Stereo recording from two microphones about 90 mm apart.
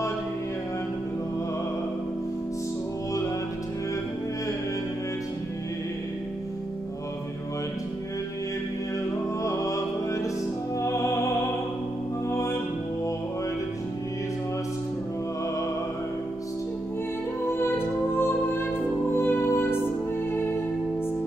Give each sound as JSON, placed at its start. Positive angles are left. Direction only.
{"t": 9.4, "sound": "music", "side_deg": 35}
{"t": 12.3, "sound": "music", "side_deg": 35}
{"t": 17.5, "sound": "music", "side_deg": 25}